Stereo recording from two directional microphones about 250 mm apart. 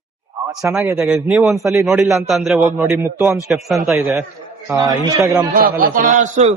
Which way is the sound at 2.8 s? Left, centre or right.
Centre.